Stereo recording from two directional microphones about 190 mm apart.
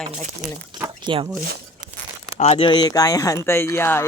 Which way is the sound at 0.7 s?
25° right (ahead or behind).